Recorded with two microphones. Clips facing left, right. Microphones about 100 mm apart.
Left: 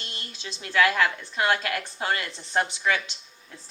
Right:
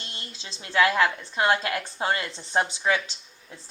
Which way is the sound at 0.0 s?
30° right (ahead or behind).